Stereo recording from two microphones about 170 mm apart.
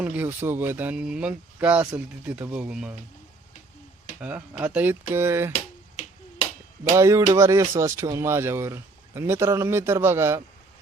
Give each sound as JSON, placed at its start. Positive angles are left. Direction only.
{"t": 0.0, "sound": "speech", "side_deg": -10}
{"t": 4.2, "sound": "speech", "side_deg": -10}
{"t": 5.5, "sound": "finger snapping", "side_deg": 40}
{"t": 6.9, "sound": "speech", "side_deg": -20}